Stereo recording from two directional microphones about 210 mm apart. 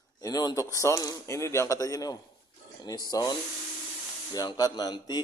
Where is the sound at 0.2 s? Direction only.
20° left (ahead or behind).